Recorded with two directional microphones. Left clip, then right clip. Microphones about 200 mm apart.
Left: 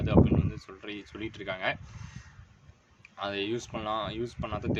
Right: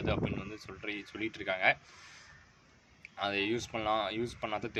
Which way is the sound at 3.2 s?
Centre (ahead or behind).